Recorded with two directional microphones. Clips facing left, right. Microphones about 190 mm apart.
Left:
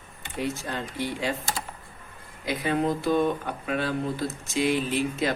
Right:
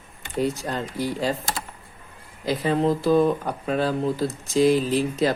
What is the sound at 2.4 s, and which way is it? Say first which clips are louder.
Speech: right 4 dB; 30° right (ahead or behind).